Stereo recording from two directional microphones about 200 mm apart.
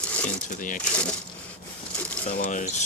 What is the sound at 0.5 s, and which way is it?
Speech, 40° left (ahead or behind).